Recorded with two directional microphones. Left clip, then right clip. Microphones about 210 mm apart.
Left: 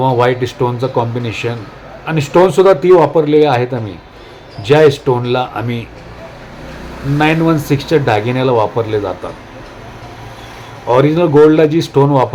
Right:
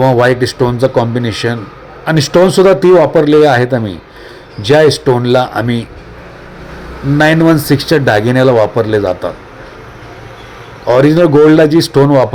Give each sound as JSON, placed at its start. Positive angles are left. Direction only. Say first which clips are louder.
{"t": 0.0, "sound": "speech", "louder": "right 3 dB", "side_deg": -20}
{"t": 7.2, "sound": "speech", "louder": "right 4 dB", "side_deg": -25}
{"t": 10.8, "sound": "speech", "louder": "right 3 dB", "side_deg": -20}